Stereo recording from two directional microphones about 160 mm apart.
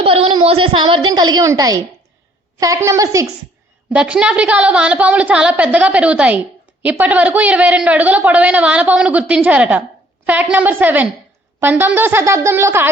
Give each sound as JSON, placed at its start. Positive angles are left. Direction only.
{"t": 0.0, "sound": "a woman's voice", "side_deg": -35}
{"t": 3.9, "sound": "speech", "side_deg": -5}